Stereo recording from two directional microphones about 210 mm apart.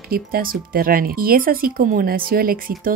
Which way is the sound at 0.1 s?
45° right (ahead or behind).